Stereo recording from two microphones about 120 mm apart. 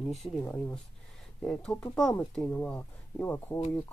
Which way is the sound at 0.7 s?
5° left (ahead or behind).